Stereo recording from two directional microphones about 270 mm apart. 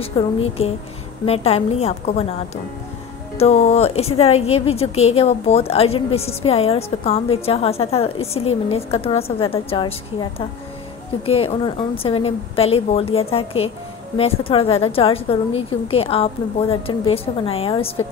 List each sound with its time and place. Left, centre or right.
0.0 s a woman's voice: left
11.2 s a woman's voice: left